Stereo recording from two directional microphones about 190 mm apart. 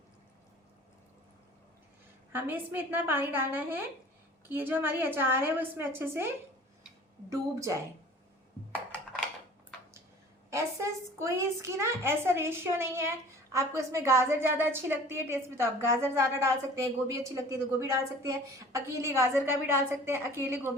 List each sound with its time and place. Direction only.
2.3 s a woman's voice: 10° right (ahead or behind)
10.5 s a woman's voice: 15° right (ahead or behind)